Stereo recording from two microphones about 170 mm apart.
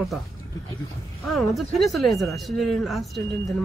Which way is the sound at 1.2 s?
Centre (ahead or behind).